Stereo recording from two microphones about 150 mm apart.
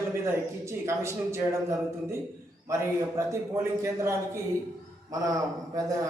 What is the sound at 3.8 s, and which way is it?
Speech, 20° right (ahead or behind).